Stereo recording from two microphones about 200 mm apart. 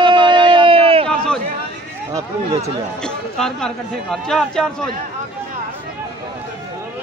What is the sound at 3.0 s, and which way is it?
Speech, 5° left (ahead or behind).